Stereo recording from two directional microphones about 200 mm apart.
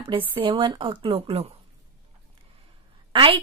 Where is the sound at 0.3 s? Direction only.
25° right (ahead or behind).